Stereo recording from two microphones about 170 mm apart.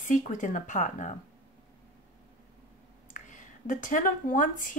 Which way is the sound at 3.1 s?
50° left (ahead or behind).